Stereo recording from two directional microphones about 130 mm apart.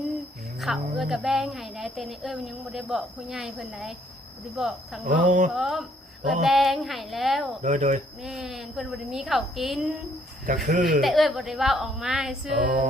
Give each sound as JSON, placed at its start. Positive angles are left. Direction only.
{"t": 0.6, "sound": "speech", "side_deg": 0}
{"t": 5.0, "sound": "speech", "side_deg": -75}
{"t": 5.5, "sound": "speech", "side_deg": 0}
{"t": 7.6, "sound": "speech", "side_deg": -70}
{"t": 8.2, "sound": "speech", "side_deg": 0}
{"t": 10.7, "sound": "a sound", "side_deg": -90}
{"t": 11.0, "sound": "speech", "side_deg": 0}
{"t": 12.5, "sound": "a sound", "side_deg": -80}